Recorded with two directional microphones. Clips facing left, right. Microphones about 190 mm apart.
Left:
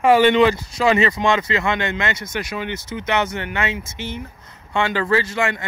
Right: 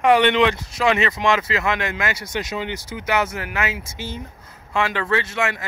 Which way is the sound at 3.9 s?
20° left (ahead or behind).